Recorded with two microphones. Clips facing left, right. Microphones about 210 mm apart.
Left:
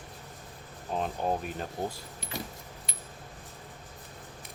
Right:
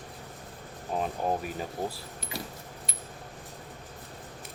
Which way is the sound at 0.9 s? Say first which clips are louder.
Right 1 dB; 5° right (ahead or behind).